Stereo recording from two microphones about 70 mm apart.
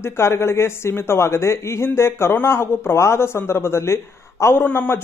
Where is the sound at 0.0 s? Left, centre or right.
Left.